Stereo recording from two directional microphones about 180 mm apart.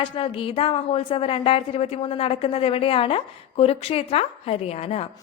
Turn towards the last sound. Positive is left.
turn(degrees=35)  # may be behind; listen again after turning